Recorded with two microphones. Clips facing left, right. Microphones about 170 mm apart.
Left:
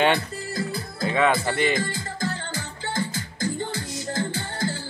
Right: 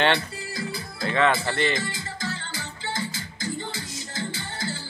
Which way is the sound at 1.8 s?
50° left (ahead or behind).